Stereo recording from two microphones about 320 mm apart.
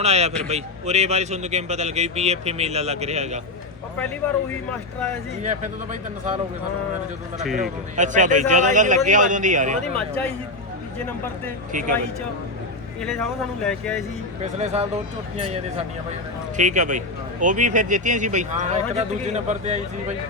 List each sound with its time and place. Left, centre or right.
0.0 s a man's voice: centre
5.4 s a man's voice: right
7.4 s speech: centre
7.9 s a man's voice: right
11.7 s a man's voice: right
13.0 s speech: centre
14.4 s a man's voice: right
16.6 s a man's voice: right